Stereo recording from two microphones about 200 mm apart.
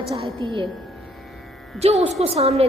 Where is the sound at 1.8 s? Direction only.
30° right (ahead or behind).